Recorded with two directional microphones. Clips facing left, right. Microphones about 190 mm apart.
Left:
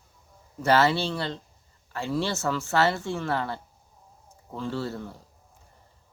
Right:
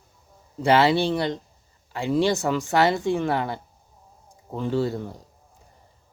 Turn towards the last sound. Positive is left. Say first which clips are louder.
# right 7 dB
turn(degrees=-15)  # may be behind; listen again after turning